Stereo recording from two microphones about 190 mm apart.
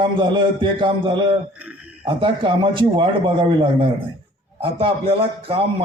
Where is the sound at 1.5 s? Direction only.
10° right (ahead or behind).